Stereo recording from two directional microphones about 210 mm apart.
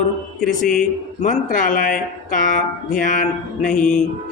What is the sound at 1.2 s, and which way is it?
A woman's voice, 40° left (ahead or behind).